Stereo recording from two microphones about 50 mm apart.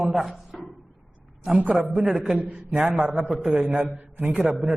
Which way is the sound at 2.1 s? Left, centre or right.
Centre.